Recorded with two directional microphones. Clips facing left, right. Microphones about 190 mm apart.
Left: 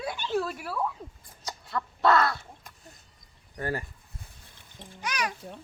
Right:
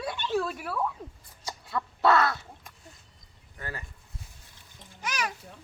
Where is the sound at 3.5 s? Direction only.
40° left (ahead or behind).